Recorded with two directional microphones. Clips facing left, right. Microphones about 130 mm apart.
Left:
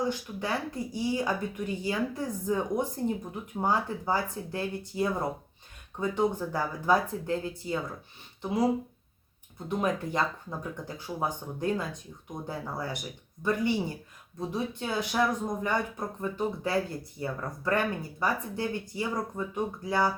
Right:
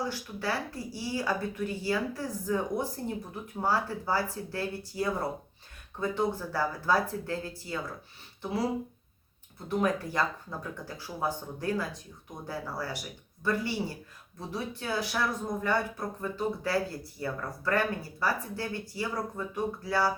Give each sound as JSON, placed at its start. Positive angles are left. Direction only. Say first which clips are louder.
{"t": 0.0, "sound": "speech", "louder": "left 2 dB", "side_deg": 20}
{"t": 9.6, "sound": "speech", "louder": "right 1 dB", "side_deg": 20}